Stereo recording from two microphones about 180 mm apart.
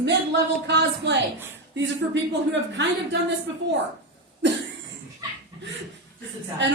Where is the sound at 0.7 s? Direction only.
75° right (ahead or behind).